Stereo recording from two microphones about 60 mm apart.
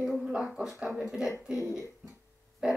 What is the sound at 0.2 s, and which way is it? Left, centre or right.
Speech, centre.